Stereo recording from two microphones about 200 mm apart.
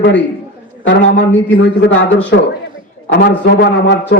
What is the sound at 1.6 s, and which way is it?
Speech, 65° left (ahead or behind).